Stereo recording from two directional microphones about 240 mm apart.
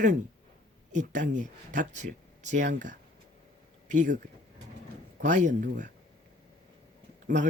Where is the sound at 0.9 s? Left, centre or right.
Right.